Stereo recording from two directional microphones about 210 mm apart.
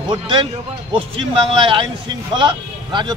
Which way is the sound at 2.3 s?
20° right (ahead or behind).